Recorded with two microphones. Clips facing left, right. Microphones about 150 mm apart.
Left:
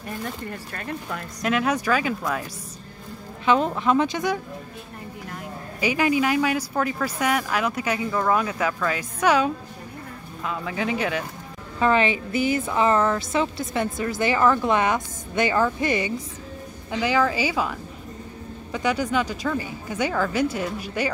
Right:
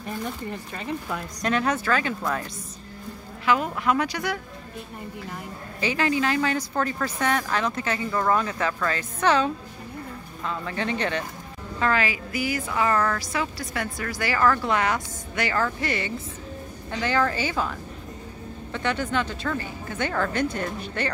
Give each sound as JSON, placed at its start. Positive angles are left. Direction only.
{"t": 0.2, "sound": "speech", "side_deg": -15}
{"t": 1.4, "sound": "speech", "side_deg": 5}
{"t": 3.4, "sound": "a woman's voice", "side_deg": 25}
{"t": 5.8, "sound": "speech", "side_deg": 15}
{"t": 11.8, "sound": "a woman's voice", "side_deg": 20}